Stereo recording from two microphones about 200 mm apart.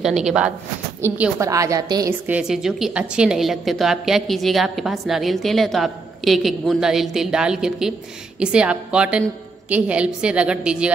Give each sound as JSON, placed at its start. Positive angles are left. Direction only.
{"t": 0.0, "sound": "a woman's voice", "side_deg": 0}
{"t": 2.2, "sound": "a woman's voice", "side_deg": -5}